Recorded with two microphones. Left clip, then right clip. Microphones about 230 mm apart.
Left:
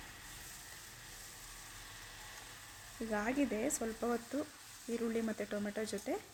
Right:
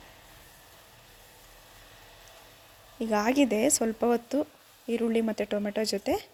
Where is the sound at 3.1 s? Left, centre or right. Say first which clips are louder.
Right 11 dB; right.